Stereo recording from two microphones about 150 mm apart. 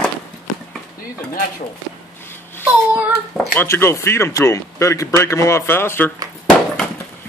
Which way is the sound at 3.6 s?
15° left (ahead or behind).